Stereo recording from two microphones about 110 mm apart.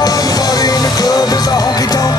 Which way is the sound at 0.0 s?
35° left (ahead or behind).